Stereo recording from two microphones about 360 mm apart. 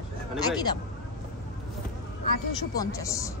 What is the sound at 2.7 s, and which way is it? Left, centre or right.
Speech, centre.